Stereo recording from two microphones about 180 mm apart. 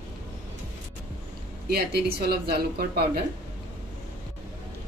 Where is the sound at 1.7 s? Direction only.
60° right (ahead or behind).